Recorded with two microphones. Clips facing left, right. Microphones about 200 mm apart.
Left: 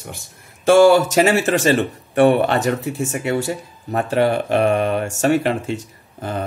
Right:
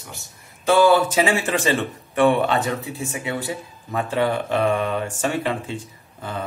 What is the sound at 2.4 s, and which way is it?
Speech, 65° left (ahead or behind).